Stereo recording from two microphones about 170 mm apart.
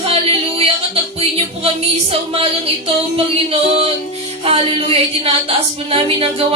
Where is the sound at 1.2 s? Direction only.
35° right (ahead or behind).